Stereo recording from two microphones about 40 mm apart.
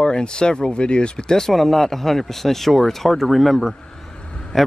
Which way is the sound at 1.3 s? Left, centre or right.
Centre.